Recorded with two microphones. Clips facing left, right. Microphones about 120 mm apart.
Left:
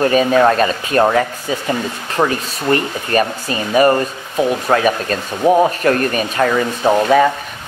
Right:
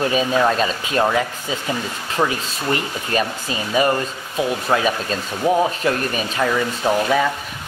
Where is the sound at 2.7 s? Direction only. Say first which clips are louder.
Left 6 dB; 55° left (ahead or behind).